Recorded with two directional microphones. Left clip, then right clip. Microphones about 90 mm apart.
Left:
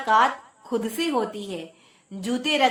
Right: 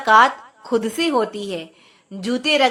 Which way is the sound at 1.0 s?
20° right (ahead or behind).